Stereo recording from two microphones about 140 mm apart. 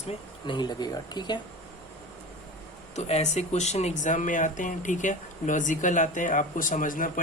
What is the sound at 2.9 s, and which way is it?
Speech, 55° left (ahead or behind).